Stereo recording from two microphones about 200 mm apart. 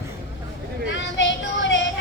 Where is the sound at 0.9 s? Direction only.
70° left (ahead or behind).